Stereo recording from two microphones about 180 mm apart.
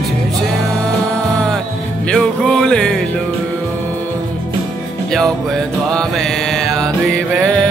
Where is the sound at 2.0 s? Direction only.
5° left (ahead or behind).